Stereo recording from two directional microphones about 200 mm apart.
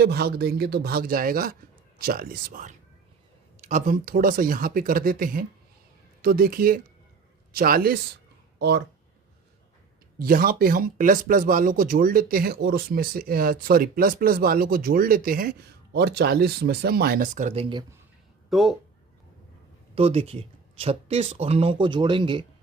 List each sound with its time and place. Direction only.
0.0 s speech: 55° right (ahead or behind)
10.2 s speech: 45° right (ahead or behind); by 17.8 s 25° right (ahead or behind)
18.5 s speech: centre (ahead or behind)
20.0 s speech: 30° right (ahead or behind)